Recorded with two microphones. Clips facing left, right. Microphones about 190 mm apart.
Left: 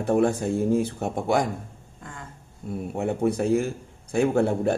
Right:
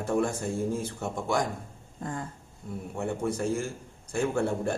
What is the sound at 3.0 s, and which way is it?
Speech, 65° left (ahead or behind).